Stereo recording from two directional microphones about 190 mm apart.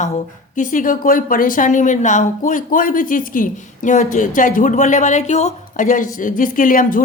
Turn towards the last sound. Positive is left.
turn(degrees=45)  # may be behind; listen again after turning